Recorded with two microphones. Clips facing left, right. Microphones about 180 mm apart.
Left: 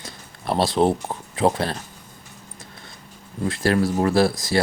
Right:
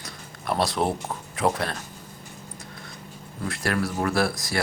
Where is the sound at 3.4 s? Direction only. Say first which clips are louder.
Left 6 dB; 25° left (ahead or behind).